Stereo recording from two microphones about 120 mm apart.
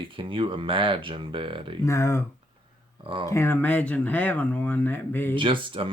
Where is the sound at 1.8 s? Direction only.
25° left (ahead or behind).